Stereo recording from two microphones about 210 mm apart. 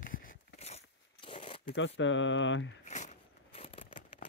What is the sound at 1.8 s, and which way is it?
Speech, 60° left (ahead or behind).